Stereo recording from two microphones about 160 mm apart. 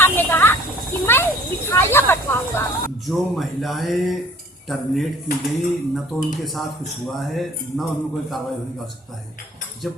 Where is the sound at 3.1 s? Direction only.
Centre (ahead or behind).